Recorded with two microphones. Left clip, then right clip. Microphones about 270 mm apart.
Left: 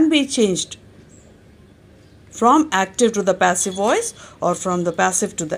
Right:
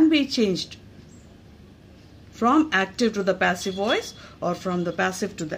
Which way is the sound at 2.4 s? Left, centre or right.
Centre.